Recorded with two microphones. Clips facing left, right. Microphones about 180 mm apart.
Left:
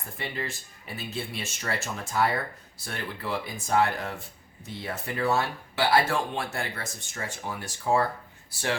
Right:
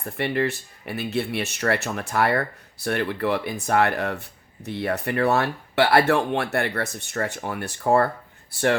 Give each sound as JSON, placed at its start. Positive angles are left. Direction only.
{"t": 0.0, "sound": "speech", "side_deg": -65}